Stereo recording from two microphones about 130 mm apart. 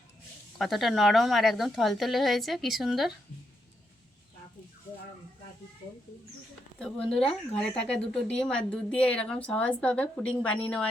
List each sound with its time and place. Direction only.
0.6 s a woman's voice: centre (ahead or behind)
6.7 s speech: 5° left (ahead or behind)